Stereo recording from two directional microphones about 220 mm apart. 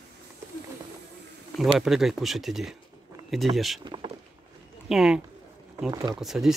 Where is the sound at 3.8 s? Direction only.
20° right (ahead or behind).